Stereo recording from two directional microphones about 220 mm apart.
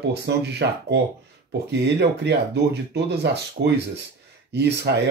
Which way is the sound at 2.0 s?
50° right (ahead or behind).